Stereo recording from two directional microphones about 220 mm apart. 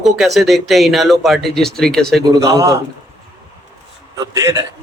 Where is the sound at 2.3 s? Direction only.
15° right (ahead or behind).